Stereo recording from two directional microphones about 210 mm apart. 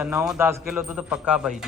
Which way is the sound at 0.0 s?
5° right (ahead or behind).